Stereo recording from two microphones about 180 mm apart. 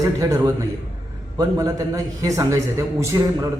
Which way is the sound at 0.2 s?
20° right (ahead or behind).